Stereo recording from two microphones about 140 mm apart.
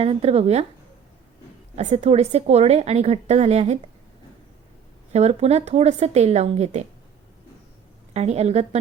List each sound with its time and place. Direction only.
0.0 s a woman's voice: 45° right (ahead or behind)
1.7 s a woman's voice: 55° right (ahead or behind)
5.1 s a woman's voice: 50° right (ahead or behind)
8.1 s a woman's voice: 50° right (ahead or behind)